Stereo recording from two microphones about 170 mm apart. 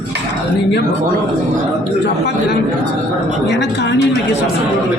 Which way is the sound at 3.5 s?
90° left.